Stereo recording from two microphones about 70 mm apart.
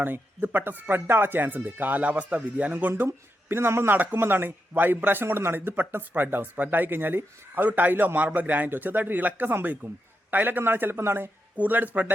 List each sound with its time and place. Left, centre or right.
0.0 s speech: right
2.9 s a man's voice: right